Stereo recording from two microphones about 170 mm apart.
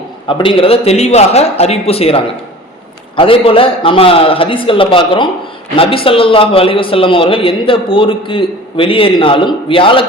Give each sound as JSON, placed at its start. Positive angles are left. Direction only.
{"t": 0.3, "sound": "a man's voice", "side_deg": 30}